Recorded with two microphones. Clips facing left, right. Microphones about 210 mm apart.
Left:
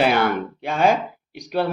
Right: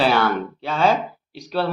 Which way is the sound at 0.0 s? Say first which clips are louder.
Even; 15° left (ahead or behind).